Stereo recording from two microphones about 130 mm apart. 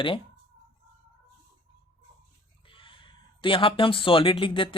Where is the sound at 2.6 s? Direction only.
40° left (ahead or behind).